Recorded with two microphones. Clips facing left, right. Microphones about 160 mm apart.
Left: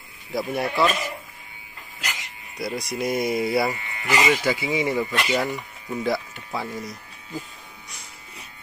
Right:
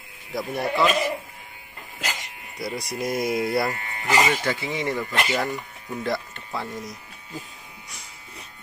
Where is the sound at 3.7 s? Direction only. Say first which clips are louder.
Right 1 dB; 45° right (ahead or behind).